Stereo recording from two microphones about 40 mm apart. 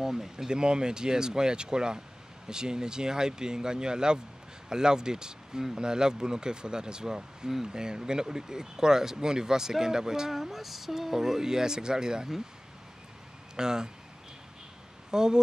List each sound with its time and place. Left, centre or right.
0.0 s speech: centre
0.5 s speech: right
13.6 s speech: centre
15.0 s speech: centre